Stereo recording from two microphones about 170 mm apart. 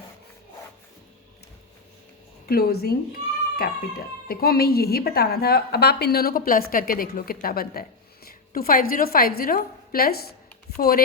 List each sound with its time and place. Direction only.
2.5 s a woman's voice: 65° left (ahead or behind)